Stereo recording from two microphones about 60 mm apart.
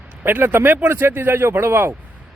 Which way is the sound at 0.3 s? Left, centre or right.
Right.